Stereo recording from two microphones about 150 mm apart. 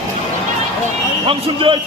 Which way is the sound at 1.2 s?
35° right (ahead or behind).